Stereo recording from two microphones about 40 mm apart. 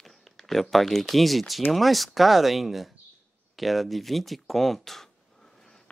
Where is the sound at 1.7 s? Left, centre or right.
Centre.